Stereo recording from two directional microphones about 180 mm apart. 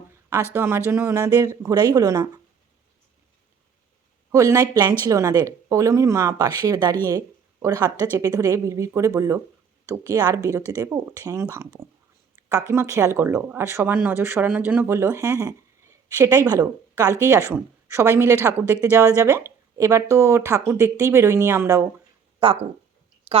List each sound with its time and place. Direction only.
0.5 s speech: 15° right (ahead or behind)
4.3 s speech: 15° right (ahead or behind)
12.4 s a sound: 20° right (ahead or behind)
12.7 s speech: 15° right (ahead or behind)
22.4 s speech: 30° right (ahead or behind)
23.3 s a sound: 35° right (ahead or behind)